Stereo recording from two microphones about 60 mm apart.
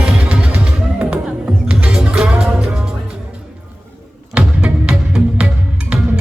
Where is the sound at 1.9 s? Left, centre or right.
Centre.